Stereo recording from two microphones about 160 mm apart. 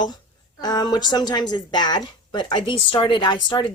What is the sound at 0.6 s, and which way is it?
A woman's voice, 25° left (ahead or behind).